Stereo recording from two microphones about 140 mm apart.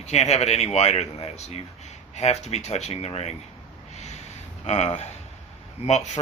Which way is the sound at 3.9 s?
55° left (ahead or behind).